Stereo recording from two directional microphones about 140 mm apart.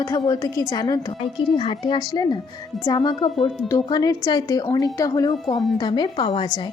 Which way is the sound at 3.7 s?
30° left (ahead or behind).